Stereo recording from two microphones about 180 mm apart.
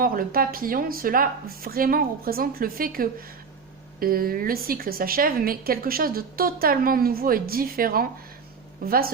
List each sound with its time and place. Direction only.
0.0 s a woman's voice: 50° right (ahead or behind)